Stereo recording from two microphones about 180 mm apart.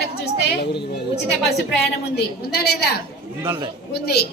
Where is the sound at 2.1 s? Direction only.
60° left (ahead or behind).